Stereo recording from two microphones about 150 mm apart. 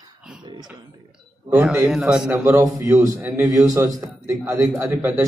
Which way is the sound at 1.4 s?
10° right (ahead or behind).